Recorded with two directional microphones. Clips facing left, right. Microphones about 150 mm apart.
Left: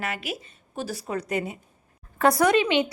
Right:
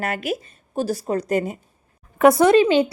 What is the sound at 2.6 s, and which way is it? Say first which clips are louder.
Speech: right 7 dB; 35° right (ahead or behind).